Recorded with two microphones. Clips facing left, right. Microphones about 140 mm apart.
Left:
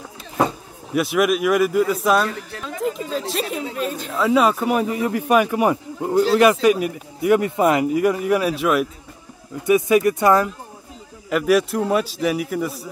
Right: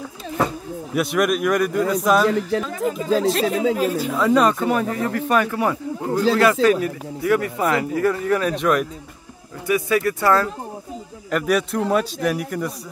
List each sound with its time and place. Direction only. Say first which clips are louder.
0.9 s speech: left 1 dB; centre (ahead or behind)
9.7 s speech: left 4 dB; 20° left (ahead or behind)
11.2 s speech: left 3 dB; 5° left (ahead or behind)